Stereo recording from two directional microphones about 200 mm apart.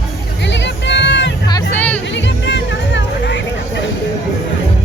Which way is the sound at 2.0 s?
60° left (ahead or behind).